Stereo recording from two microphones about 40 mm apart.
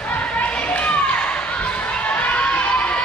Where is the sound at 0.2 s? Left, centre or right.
Left.